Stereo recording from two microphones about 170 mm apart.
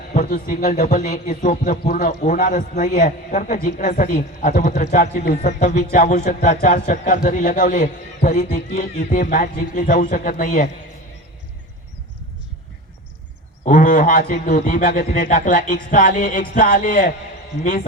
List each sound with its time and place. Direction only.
0.1 s a man's voice: 50° left (ahead or behind)
5.5 s a man's voice: 45° left (ahead or behind)
13.7 s a man's voice: 50° left (ahead or behind)